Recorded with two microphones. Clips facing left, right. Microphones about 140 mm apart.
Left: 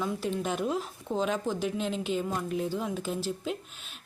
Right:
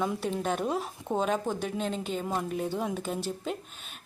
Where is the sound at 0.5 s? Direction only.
45° right (ahead or behind).